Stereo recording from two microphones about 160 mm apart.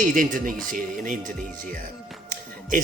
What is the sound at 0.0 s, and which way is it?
Speech, 55° right (ahead or behind).